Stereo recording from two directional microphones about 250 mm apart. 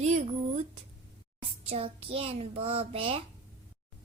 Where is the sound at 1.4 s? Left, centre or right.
Right.